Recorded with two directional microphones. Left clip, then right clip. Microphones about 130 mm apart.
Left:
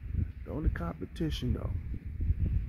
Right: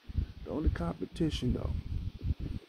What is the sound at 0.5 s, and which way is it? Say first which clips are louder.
Speech: right 3 dB; 5° right (ahead or behind).